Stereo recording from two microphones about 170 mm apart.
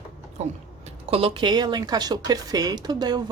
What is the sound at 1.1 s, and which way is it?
Speech, 35° right (ahead or behind).